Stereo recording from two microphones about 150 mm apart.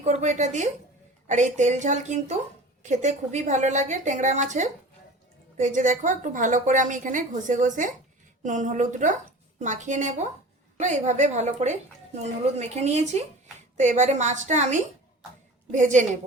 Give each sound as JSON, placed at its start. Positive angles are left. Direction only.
{"t": 0.0, "sound": "a woman's voice", "side_deg": -50}